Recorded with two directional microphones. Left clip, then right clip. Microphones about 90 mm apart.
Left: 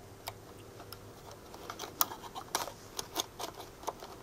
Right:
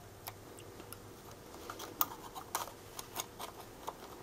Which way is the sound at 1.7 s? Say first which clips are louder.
Left 4 dB; centre (ahead or behind).